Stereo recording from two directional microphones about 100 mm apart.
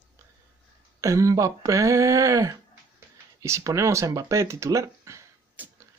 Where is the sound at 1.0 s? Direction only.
30° right (ahead or behind).